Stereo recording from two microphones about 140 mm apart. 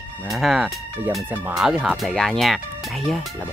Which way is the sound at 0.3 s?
Centre (ahead or behind).